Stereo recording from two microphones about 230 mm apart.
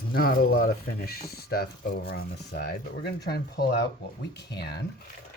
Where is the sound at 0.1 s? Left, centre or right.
Left.